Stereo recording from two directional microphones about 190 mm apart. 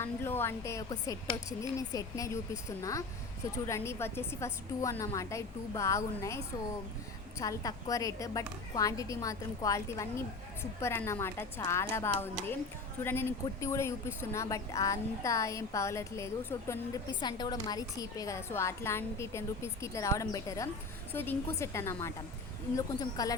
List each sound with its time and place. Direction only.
0.0 s a woman's voice: 10° left (ahead or behind)
17.1 s a woman's voice: 25° left (ahead or behind)